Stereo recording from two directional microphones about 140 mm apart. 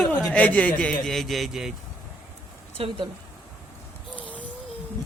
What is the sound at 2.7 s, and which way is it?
Speech, 40° right (ahead or behind).